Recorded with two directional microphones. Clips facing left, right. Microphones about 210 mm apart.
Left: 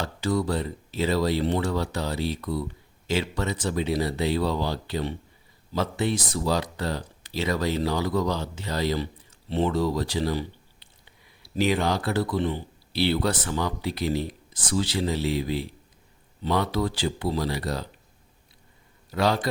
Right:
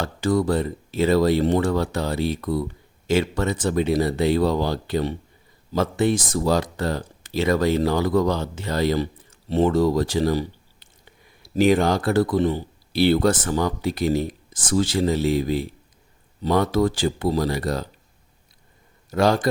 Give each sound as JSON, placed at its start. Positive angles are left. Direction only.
{"t": 0.0, "sound": "speech", "side_deg": -50}
{"t": 19.1, "sound": "speech", "side_deg": -45}